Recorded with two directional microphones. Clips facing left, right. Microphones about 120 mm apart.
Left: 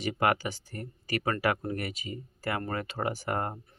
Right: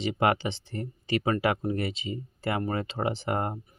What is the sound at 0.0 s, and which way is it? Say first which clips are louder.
Speech: right 2 dB; 25° right (ahead or behind).